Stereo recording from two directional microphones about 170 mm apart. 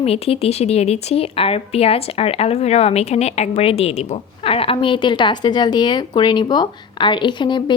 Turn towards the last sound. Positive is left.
turn(degrees=25)  # may be behind; listen again after turning